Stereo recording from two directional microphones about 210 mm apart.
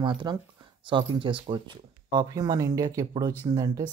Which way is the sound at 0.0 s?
20° right (ahead or behind).